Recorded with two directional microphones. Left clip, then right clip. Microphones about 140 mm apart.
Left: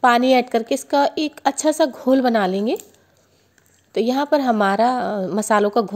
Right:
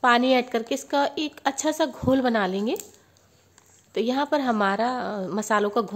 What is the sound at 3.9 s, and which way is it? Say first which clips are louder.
A woman's voice: left 6 dB; 35° left (ahead or behind).